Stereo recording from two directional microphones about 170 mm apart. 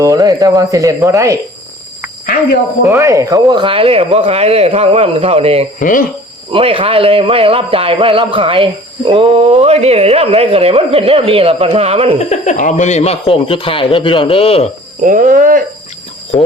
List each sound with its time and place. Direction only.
0.0 s speech: 20° right (ahead or behind)
2.8 s speech: 15° right (ahead or behind); by 5.6 s 35° right (ahead or behind)
5.8 s speech: 55° left (ahead or behind)
6.5 s speech: 30° right (ahead or behind)
12.2 s speech: 45° left (ahead or behind)
15.0 s speech: 50° right (ahead or behind)